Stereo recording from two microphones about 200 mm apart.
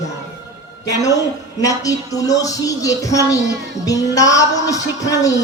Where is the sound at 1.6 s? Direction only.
15° left (ahead or behind).